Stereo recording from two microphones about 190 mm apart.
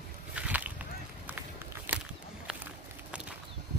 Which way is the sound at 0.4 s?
10° right (ahead or behind).